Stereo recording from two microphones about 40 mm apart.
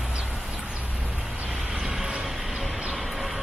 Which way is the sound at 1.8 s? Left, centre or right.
Centre.